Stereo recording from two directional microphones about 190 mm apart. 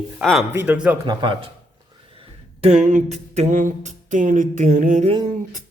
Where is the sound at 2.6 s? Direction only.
40° right (ahead or behind).